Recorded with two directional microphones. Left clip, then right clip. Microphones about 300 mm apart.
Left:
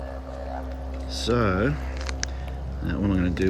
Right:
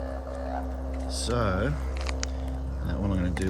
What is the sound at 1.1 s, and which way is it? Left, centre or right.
Speech, centre.